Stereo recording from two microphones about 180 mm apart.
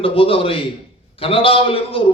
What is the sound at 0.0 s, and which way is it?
A man's voice, 30° left (ahead or behind).